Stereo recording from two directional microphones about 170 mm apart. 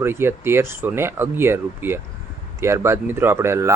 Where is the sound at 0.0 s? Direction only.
15° right (ahead or behind).